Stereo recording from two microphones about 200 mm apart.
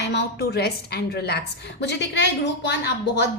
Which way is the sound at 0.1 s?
55° left (ahead or behind).